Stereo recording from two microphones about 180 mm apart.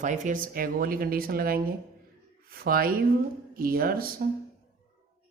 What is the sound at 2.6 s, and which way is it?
Speech, 55° right (ahead or behind).